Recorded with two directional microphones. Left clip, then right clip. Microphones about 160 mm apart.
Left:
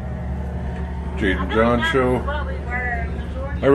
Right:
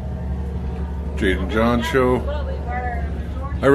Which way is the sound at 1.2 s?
5° right (ahead or behind).